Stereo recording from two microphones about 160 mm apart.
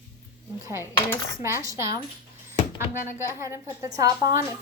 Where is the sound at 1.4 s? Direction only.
20° right (ahead or behind).